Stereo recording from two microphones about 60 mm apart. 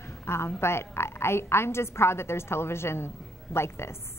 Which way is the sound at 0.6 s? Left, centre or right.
Left.